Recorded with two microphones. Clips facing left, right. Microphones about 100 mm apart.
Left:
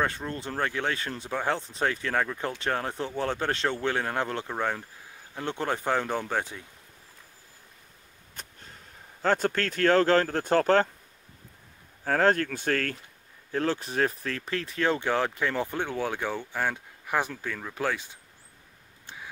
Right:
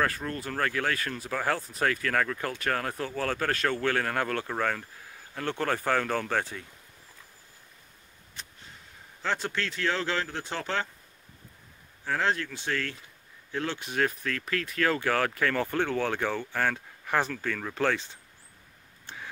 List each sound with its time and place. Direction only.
0.0 s speech: 25° left (ahead or behind)
8.4 s a sound: 45° left (ahead or behind)
9.2 s speech: 45° left (ahead or behind)
12.0 s speech: 45° left (ahead or behind); by 18.1 s 10° left (ahead or behind)